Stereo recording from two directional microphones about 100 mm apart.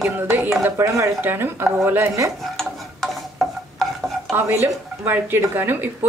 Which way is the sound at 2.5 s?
Centre (ahead or behind).